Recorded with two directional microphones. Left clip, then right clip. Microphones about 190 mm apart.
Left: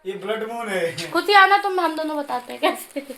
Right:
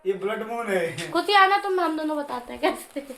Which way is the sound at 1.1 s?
45° left (ahead or behind).